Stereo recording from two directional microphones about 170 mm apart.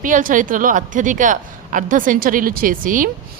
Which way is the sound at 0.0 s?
50° right (ahead or behind).